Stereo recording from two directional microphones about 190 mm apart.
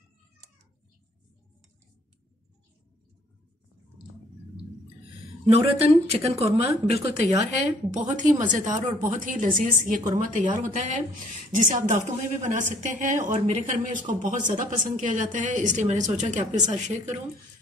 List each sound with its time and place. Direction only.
5.5 s a woman's voice: 30° right (ahead or behind)